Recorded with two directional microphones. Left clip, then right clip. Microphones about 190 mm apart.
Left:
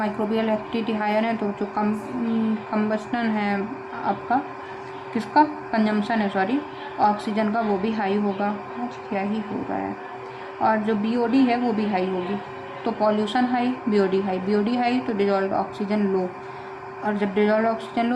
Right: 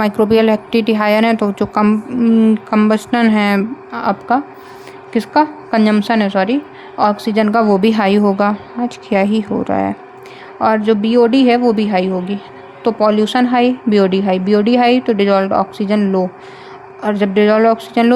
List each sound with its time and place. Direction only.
0.0 s a woman's voice: 55° right (ahead or behind)